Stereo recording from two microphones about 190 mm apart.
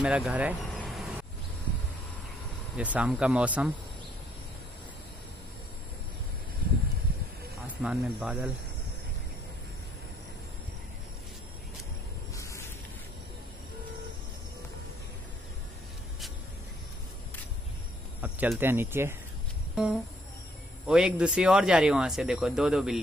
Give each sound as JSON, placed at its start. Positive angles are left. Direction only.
{"t": 0.0, "sound": "vehicle", "side_deg": -5}
{"t": 2.8, "sound": "speech", "side_deg": -5}
{"t": 7.6, "sound": "speech", "side_deg": -5}
{"t": 12.4, "sound": "a sound", "side_deg": 15}
{"t": 18.2, "sound": "speech", "side_deg": -10}
{"t": 19.7, "sound": "a sound", "side_deg": -5}
{"t": 20.8, "sound": "speech", "side_deg": -5}